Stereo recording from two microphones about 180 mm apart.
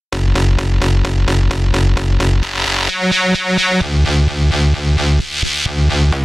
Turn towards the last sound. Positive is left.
turn(degrees=0)  # may be behind; listen again after turning